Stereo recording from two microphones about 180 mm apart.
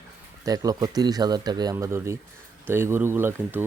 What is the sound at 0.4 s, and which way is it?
Speech, 20° right (ahead or behind).